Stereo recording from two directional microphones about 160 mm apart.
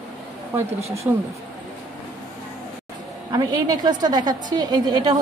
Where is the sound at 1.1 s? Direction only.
15° right (ahead or behind).